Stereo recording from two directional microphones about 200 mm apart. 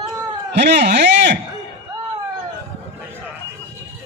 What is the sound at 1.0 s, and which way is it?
Speech, 60° right (ahead or behind).